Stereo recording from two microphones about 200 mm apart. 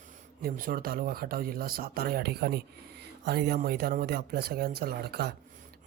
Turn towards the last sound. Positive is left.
turn(degrees=-55)  # may be behind; listen again after turning